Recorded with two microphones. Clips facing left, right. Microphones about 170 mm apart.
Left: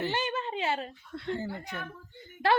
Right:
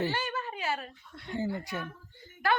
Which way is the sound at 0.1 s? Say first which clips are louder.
Left 3 dB; 20° left (ahead or behind).